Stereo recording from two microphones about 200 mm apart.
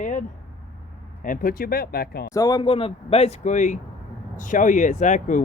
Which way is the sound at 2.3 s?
20° left (ahead or behind).